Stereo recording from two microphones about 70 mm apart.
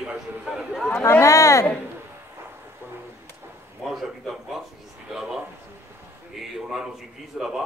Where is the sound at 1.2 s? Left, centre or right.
Left.